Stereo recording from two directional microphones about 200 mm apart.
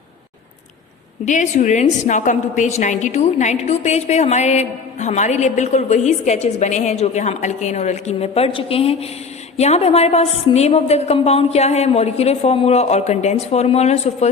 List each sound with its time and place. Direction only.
1.2 s a woman's voice: 35° left (ahead or behind)